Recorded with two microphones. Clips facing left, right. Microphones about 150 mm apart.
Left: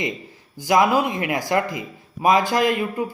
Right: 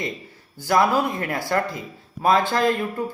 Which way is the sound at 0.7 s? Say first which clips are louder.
Left 2 dB; 15° left (ahead or behind).